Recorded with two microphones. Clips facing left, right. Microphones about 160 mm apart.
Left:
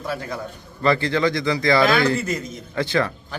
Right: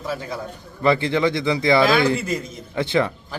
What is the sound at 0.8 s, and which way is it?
Speech, 20° right (ahead or behind).